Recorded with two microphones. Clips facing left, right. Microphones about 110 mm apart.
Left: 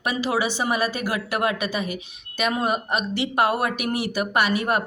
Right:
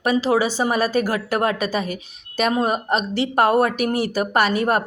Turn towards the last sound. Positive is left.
turn(degrees=-40)  # may be behind; listen again after turning